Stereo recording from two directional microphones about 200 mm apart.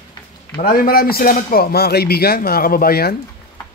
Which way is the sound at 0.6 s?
45° left (ahead or behind).